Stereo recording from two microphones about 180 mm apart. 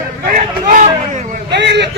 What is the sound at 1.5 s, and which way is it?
Speech, 70° right (ahead or behind).